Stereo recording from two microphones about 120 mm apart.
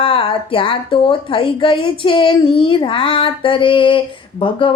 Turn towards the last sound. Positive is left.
turn(degrees=45)  # may be behind; listen again after turning